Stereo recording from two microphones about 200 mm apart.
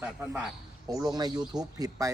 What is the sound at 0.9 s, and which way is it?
Speech, 20° right (ahead or behind).